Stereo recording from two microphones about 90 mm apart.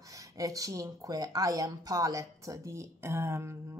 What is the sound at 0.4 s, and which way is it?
Speech, 40° right (ahead or behind).